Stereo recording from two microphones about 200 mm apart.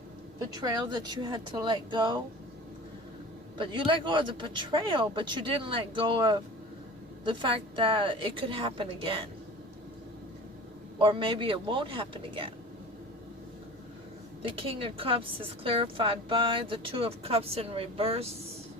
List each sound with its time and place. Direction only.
0.5 s a woman's voice: 20° right (ahead or behind)
3.6 s a woman's voice: 25° right (ahead or behind)
10.9 s a woman's voice: 25° right (ahead or behind)
14.4 s a woman's voice: 25° right (ahead or behind)